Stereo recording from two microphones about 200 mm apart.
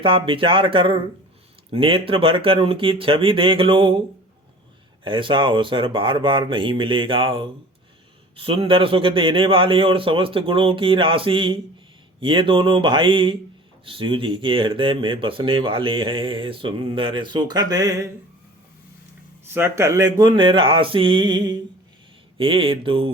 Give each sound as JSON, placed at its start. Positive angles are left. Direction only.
{"t": 0.0, "sound": "speech", "side_deg": -25}
{"t": 5.0, "sound": "speech", "side_deg": -25}
{"t": 19.5, "sound": "speech", "side_deg": -15}
{"t": 22.4, "sound": "speech", "side_deg": -25}